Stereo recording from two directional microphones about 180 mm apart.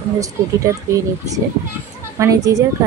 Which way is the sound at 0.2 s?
20° right (ahead or behind).